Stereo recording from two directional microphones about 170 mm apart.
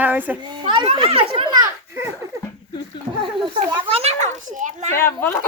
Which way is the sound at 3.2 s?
30° right (ahead or behind).